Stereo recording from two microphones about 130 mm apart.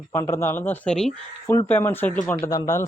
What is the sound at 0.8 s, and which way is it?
Speech, 5° left (ahead or behind).